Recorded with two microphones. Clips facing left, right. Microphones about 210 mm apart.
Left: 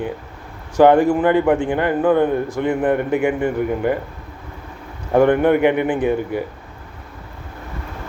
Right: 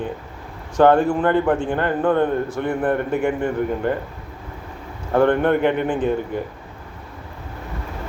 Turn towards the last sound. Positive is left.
turn(degrees=10)  # may be behind; listen again after turning